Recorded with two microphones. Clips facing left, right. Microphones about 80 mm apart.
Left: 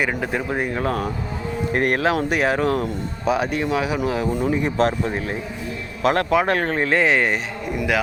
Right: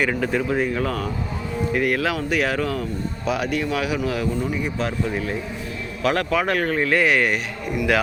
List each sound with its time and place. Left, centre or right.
0.0 s speech: centre
0.7 s a man's voice: left
1.7 s speech: left
2.0 s speech: left
4.3 s speech: left
4.8 s a man's voice: left